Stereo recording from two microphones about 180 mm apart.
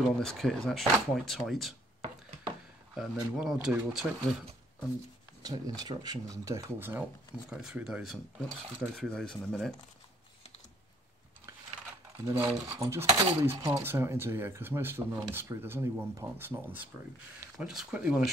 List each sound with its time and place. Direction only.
0.2 s speech: centre (ahead or behind)
2.9 s speech: centre (ahead or behind)
5.4 s speech: 20° right (ahead or behind); by 9.8 s 5° left (ahead or behind)
12.3 s speech: 10° right (ahead or behind)